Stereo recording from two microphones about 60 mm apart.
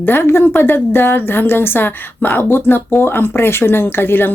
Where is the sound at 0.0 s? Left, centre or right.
Left.